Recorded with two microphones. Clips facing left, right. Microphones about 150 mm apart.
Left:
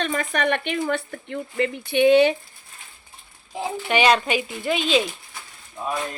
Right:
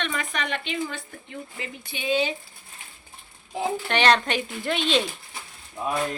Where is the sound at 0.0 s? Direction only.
45° left (ahead or behind); by 2.3 s 65° left (ahead or behind).